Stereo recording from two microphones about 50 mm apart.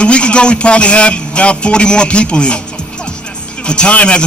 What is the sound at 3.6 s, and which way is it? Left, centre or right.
Speech, centre.